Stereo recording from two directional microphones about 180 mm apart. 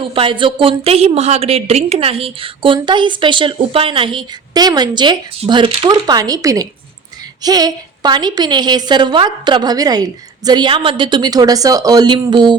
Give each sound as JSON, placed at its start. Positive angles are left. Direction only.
{"t": 0.0, "sound": "a woman's voice", "side_deg": -30}